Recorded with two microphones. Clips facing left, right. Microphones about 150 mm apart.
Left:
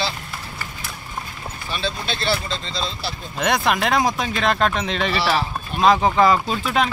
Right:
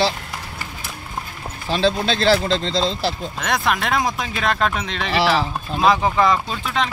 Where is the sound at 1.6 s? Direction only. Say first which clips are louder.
Right 8 dB; 90° right.